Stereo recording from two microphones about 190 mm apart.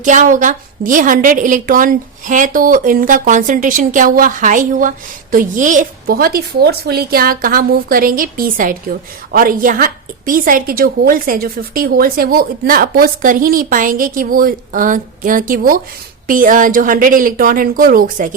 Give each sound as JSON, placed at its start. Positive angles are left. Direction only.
{"t": 0.0, "sound": "a woman's voice", "side_deg": -40}